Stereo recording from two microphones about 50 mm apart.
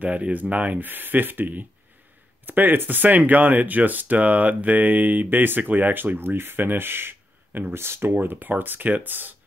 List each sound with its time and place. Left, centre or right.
0.0 s speech: right
0.8 s speech: right